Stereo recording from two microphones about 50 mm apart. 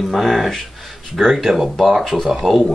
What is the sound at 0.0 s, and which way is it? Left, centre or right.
Speech, centre.